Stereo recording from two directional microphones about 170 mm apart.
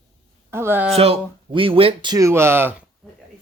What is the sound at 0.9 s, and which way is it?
Speech, 35° right (ahead or behind).